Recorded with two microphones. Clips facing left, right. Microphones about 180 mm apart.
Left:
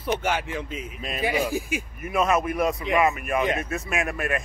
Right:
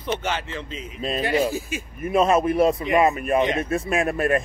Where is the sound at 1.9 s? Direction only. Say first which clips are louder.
Right 5 dB; 30° right (ahead or behind).